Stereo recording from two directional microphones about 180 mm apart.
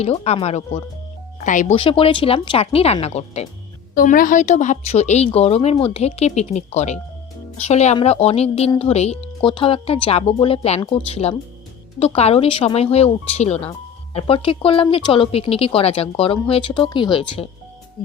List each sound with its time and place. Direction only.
0.0 s speech: 35° left (ahead or behind)
1.7 s speech: 30° left (ahead or behind)
3.9 s speech: 50° left (ahead or behind); by 17.5 s 30° left (ahead or behind)